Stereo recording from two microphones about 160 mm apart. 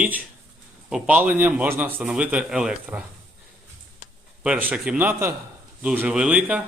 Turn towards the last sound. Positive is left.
turn(degrees=-10)  # may be behind; listen again after turning